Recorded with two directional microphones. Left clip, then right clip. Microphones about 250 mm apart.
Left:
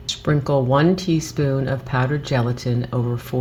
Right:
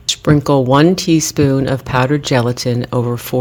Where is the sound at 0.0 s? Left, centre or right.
Right.